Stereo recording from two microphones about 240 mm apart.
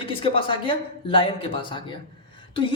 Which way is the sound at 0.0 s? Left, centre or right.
Left.